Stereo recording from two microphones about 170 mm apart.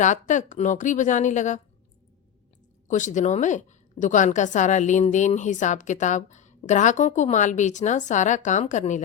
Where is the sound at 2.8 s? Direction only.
45° left (ahead or behind).